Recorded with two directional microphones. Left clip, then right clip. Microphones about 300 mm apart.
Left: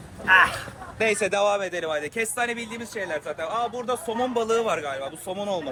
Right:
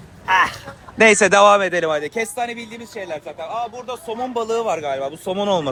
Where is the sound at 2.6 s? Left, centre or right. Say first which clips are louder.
Even; left.